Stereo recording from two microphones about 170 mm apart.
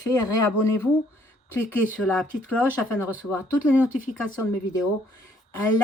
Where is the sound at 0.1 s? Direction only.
20° left (ahead or behind).